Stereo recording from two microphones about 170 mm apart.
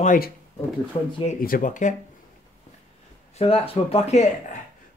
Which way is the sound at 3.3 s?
35° left (ahead or behind).